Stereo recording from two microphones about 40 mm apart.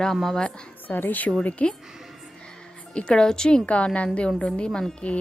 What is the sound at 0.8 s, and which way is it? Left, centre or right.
Speech, left.